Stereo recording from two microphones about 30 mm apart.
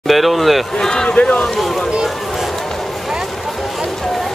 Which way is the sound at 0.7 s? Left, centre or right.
Left.